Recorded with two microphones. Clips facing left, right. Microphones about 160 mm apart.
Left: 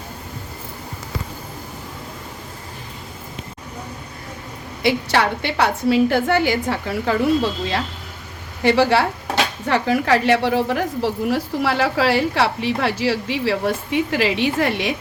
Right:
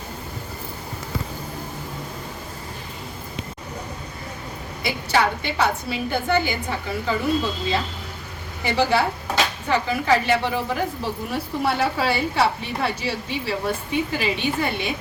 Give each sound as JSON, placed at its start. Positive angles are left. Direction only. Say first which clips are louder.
{"t": 4.8, "sound": "a woman's voice", "louder": "left 3 dB", "side_deg": 75}
{"t": 8.6, "sound": "a woman's voice", "louder": "left 5 dB", "side_deg": 80}
{"t": 9.6, "sound": "a woman's voice", "louder": "left 3 dB", "side_deg": 70}